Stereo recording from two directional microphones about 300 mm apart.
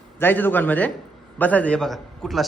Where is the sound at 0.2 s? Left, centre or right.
Centre.